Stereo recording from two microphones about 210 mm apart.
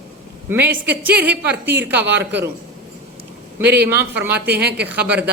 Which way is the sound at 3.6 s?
10° right (ahead or behind).